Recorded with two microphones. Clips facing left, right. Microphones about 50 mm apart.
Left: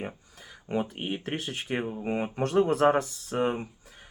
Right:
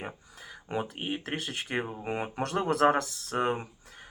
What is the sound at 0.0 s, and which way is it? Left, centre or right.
Speech, centre.